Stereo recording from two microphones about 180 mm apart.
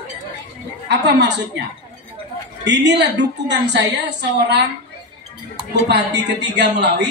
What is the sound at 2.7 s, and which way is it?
A man's voice, 75° right (ahead or behind).